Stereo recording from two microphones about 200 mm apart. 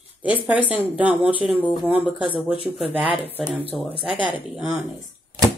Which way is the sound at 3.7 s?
Centre (ahead or behind).